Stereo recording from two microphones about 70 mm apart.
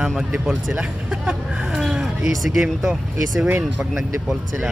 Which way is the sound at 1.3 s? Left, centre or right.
Centre.